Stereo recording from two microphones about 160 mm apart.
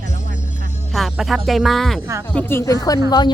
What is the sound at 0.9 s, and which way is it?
Speech, centre (ahead or behind).